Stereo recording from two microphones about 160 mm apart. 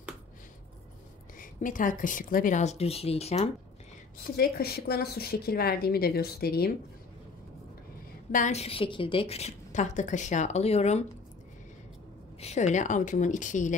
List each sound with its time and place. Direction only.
1.4 s a woman's voice: 55° left (ahead or behind); by 3.4 s 40° left (ahead or behind)
4.4 s a woman's voice: 75° left (ahead or behind)
8.3 s a woman's voice: 50° left (ahead or behind)
12.4 s a woman's voice: 45° left (ahead or behind)